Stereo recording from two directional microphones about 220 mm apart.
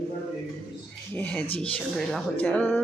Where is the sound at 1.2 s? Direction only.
5° left (ahead or behind).